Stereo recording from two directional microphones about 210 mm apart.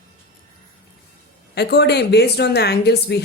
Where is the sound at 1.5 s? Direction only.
50° left (ahead or behind).